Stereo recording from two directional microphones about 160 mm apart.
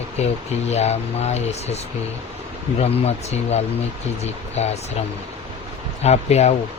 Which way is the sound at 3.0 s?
40° left (ahead or behind).